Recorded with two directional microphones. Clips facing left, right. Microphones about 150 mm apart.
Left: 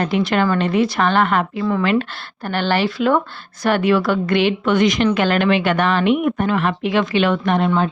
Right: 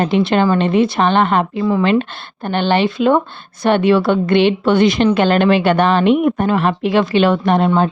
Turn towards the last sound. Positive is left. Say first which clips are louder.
# right 4 dB
turn(degrees=-35)  # may be behind; listen again after turning